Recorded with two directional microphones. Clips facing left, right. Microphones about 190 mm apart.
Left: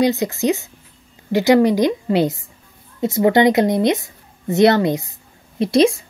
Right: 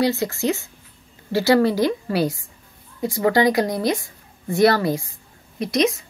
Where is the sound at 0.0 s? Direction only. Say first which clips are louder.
Left 3 dB; 20° left (ahead or behind).